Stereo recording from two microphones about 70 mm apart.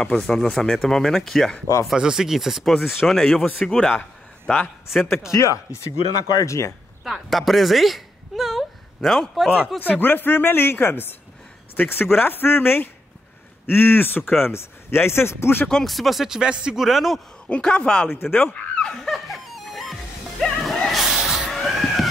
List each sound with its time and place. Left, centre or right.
0.0 s speech: centre
1.9 s a man's voice: centre
4.9 s speech: centre
5.3 s speech: left
7.1 s speech: centre
9.8 s speech: left
15.7 s speech: centre
17.5 s a man's voice: centre
19.1 s music: centre
21.5 s cat: centre